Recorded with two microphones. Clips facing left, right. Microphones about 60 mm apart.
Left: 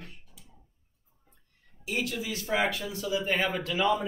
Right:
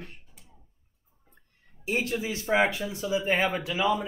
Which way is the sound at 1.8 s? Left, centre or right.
Right.